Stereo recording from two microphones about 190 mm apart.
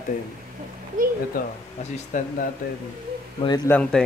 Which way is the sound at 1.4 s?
45° left (ahead or behind).